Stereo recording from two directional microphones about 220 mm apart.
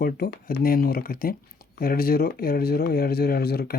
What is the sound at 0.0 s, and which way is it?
Speech, 40° left (ahead or behind).